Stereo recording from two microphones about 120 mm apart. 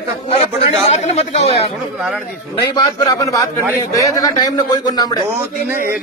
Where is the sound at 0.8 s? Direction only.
70° left (ahead or behind).